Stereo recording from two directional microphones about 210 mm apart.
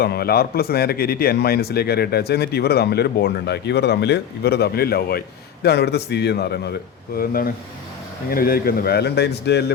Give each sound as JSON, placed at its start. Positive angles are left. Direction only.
{"t": 0.0, "sound": "speech", "side_deg": 50}